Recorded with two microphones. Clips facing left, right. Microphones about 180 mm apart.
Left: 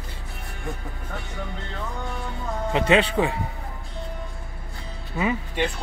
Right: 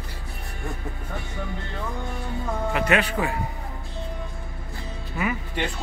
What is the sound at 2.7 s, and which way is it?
Speech, 25° left (ahead or behind).